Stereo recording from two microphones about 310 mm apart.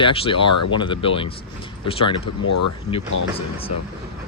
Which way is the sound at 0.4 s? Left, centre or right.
Left.